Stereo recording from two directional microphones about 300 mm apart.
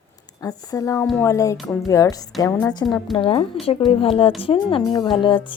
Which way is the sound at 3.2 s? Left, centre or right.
Centre.